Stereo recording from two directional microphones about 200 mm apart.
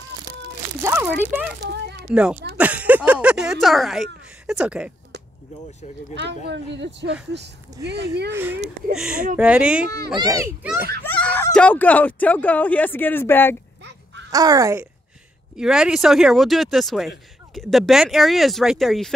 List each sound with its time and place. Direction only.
0.8 s speech: 10° right (ahead or behind)
6.1 s speech: 60° right (ahead or behind)
8.3 s a child's voice: 10° right (ahead or behind)
10.1 s a child's voice: 15° right (ahead or behind)
11.1 s speech: 10° left (ahead or behind)
13.8 s a sound: 60° right (ahead or behind)
14.3 s a child's voice: 20° right (ahead or behind)
15.5 s speech: 5° right (ahead or behind)